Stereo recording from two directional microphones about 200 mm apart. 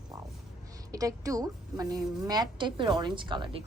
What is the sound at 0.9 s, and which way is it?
A woman's voice, 15° right (ahead or behind).